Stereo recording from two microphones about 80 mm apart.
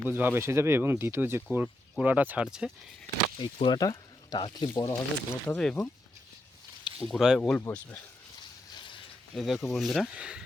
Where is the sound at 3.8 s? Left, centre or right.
Left.